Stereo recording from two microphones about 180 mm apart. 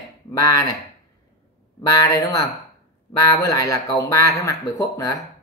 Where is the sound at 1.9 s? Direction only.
20° left (ahead or behind).